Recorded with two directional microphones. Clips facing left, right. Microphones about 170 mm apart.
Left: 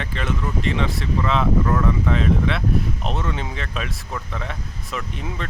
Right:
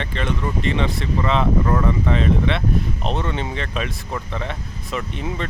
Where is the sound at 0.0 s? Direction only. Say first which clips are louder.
Right 2 dB; 5° left (ahead or behind).